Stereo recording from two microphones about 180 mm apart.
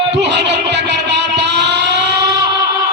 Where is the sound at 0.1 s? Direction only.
70° right (ahead or behind).